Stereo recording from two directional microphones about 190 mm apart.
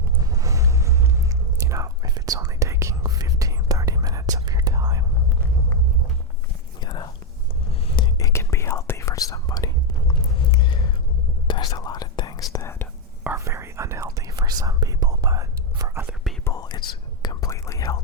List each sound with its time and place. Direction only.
0.2 s whispering: 20° right (ahead or behind)
6.8 s whispering: 25° left (ahead or behind)
10.1 s a sound: 25° left (ahead or behind)
11.4 s whispering: 25° left (ahead or behind)
13.2 s whispering: 15° right (ahead or behind)
16.4 s whispering: 15° left (ahead or behind)